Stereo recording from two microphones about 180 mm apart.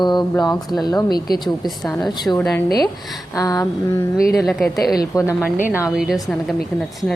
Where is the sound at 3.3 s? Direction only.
20° left (ahead or behind).